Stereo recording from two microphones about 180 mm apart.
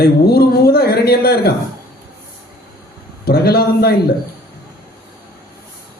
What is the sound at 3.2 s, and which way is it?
Speech, 60° left (ahead or behind).